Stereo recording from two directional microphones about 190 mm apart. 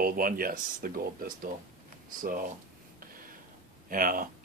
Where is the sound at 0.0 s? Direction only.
50° right (ahead or behind).